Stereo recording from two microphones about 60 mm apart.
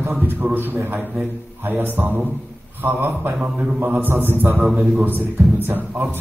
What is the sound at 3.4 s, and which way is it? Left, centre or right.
Speech, centre.